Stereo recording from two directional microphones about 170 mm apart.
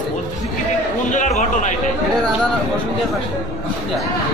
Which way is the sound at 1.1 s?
45° left (ahead or behind).